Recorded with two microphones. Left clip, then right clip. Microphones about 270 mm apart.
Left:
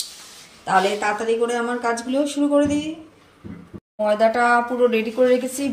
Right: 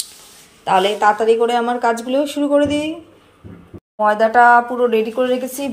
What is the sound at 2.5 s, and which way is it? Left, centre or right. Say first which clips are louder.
Speech: right 4 dB; right.